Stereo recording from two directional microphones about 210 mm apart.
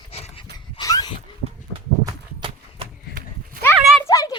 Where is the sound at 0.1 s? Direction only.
30° left (ahead or behind).